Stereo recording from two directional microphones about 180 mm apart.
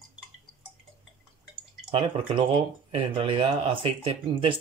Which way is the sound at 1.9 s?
30° right (ahead or behind).